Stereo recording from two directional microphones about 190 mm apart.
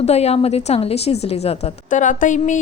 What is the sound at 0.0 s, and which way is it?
A woman's voice, 35° left (ahead or behind).